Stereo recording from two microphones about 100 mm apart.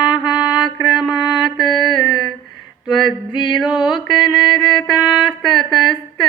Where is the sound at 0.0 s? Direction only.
45° left (ahead or behind).